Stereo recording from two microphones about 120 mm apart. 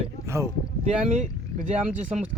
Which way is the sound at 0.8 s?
70° right (ahead or behind).